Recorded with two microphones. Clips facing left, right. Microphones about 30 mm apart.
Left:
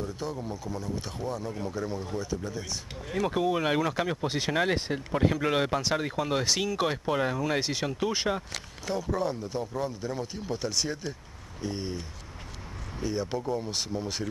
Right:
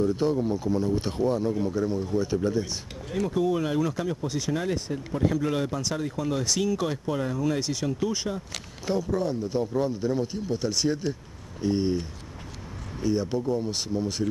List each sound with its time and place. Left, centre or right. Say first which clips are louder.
0.1 s speech: right 10 dB; right
1.5 s speech: right 7 dB; centre
2.3 s speech: right 11 dB; right
3.3 s speech: right 3 dB; left
3.6 s speech: even; left
5.3 s speech: even; left
9.1 s speech: right 3 dB; centre
9.6 s speech: right 8 dB; centre
11.6 s a sound: right 9 dB; centre
13.0 s speech: right 5 dB; centre